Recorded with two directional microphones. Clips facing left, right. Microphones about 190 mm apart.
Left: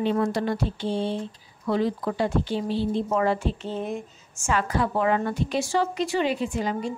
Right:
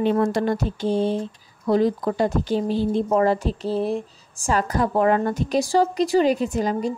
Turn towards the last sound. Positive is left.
turn(degrees=-40)  # may be behind; listen again after turning